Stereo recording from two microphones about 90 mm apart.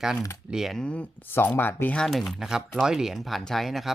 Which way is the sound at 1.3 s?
25° left (ahead or behind).